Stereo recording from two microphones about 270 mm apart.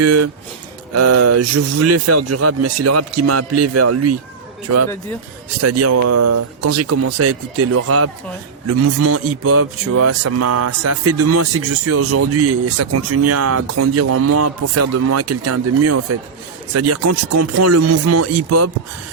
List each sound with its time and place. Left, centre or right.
0.0 s a man's voice: right
5.5 s a man's voice: right